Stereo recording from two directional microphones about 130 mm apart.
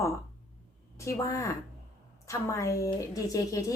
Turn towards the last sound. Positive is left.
turn(degrees=25)  # may be behind; listen again after turning